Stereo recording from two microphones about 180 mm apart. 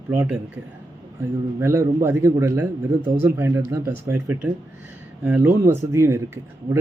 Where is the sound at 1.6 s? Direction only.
15° right (ahead or behind).